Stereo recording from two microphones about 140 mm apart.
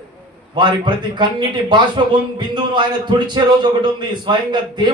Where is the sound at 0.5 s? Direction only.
30° right (ahead or behind).